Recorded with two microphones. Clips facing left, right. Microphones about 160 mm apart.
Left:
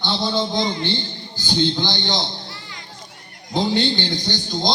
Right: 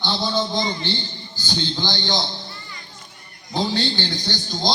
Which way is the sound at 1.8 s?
15° left (ahead or behind).